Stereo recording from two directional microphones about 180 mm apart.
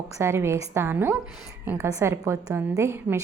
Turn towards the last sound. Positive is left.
turn(degrees=-15)  # may be behind; listen again after turning